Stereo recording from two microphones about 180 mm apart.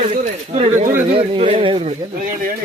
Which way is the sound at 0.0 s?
40° right (ahead or behind).